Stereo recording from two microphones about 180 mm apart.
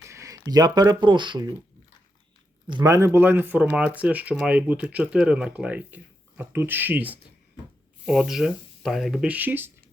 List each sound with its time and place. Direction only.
0.0 s speech: 15° right (ahead or behind)
2.6 s speech: 20° right (ahead or behind)